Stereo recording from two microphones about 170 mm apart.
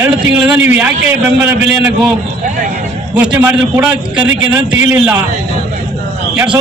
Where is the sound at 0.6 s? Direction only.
10° right (ahead or behind).